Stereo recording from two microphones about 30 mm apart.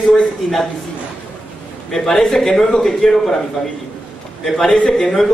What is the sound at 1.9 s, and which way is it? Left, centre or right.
A man's voice, left.